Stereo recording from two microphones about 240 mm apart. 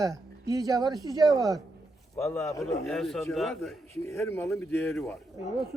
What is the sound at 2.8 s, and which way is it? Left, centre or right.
Speech, centre.